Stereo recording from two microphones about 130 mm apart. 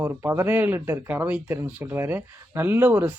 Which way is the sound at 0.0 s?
15° right (ahead or behind).